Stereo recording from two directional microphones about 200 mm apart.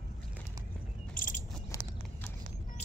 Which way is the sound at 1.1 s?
40° left (ahead or behind).